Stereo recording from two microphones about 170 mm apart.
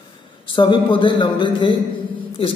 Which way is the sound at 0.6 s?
30° left (ahead or behind).